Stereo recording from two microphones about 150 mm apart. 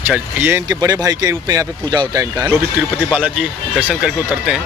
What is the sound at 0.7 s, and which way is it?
Speech, 25° right (ahead or behind).